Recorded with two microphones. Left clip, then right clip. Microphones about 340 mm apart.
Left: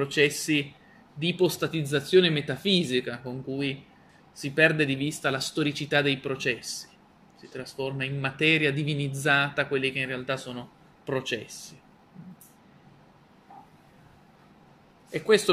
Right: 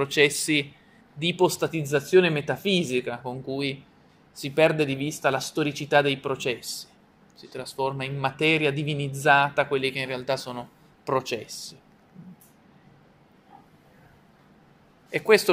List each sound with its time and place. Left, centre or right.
0.0 s speech: centre
15.0 s a man's voice: centre